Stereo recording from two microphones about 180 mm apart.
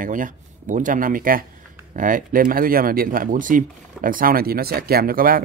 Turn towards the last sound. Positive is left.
turn(degrees=-55)  # may be behind; listen again after turning